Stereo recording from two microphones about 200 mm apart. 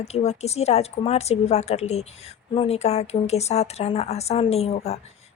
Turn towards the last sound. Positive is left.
turn(degrees=30)  # may be behind; listen again after turning